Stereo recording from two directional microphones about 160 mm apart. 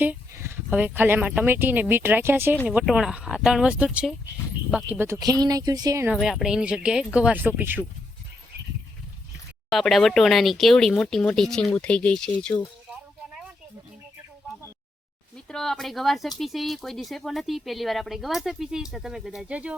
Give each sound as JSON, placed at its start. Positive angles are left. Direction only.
{"t": 0.0, "sound": "speech", "side_deg": -15}
{"t": 5.2, "sound": "speech", "side_deg": -25}
{"t": 6.1, "sound": "speech", "side_deg": 0}
{"t": 9.7, "sound": "speech", "side_deg": 0}
{"t": 12.9, "sound": "music", "side_deg": -5}
{"t": 15.4, "sound": "speech", "side_deg": 5}